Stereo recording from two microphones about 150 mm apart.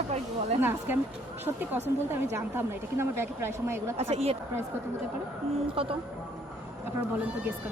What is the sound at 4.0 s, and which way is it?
Speech, 45° right (ahead or behind).